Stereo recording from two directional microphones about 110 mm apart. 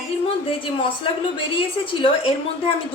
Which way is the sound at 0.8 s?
50° left (ahead or behind).